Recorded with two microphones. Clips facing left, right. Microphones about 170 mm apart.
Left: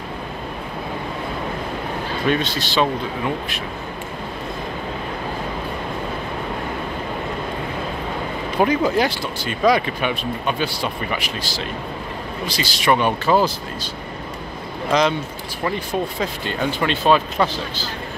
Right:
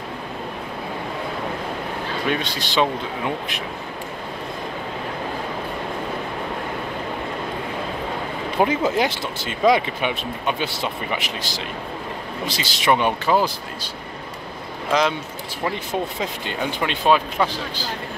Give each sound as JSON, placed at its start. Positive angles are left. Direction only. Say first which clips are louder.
{"t": 2.2, "sound": "speech", "louder": "left 5 dB", "side_deg": -15}
{"t": 8.5, "sound": "speech", "louder": "left 2 dB", "side_deg": -25}
{"t": 14.9, "sound": "speech", "louder": "left 2 dB", "side_deg": -5}
{"t": 15.9, "sound": "speech", "louder": "left 2 dB", "side_deg": -20}